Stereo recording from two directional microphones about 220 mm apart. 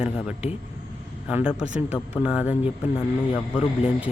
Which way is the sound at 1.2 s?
5° right (ahead or behind).